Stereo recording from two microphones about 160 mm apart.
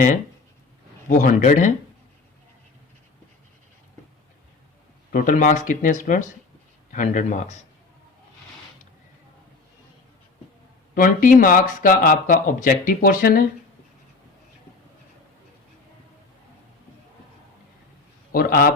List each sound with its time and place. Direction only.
1.0 s speech: 55° left (ahead or behind)
5.1 s speech: 55° left (ahead or behind)
10.9 s speech: 60° left (ahead or behind)
18.3 s a man's voice: 65° left (ahead or behind)